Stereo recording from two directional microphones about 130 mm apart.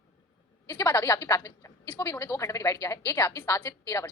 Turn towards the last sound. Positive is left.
turn(degrees=20)  # may be behind; listen again after turning